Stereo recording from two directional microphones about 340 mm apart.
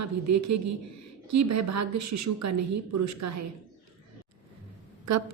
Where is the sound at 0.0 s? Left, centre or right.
Right.